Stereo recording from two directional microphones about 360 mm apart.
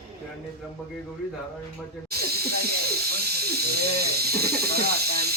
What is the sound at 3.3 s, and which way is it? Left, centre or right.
Speech, right.